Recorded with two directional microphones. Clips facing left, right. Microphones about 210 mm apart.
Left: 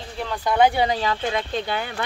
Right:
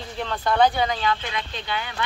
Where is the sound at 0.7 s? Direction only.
30° left (ahead or behind).